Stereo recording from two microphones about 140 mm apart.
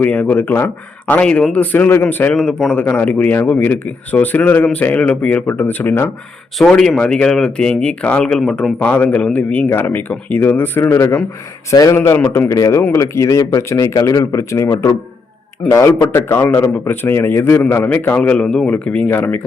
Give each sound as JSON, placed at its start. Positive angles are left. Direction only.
{"t": 0.0, "sound": "speech", "side_deg": 10}
{"t": 6.6, "sound": "speech", "side_deg": 5}